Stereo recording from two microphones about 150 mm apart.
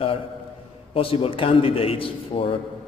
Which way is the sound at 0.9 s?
40° left (ahead or behind).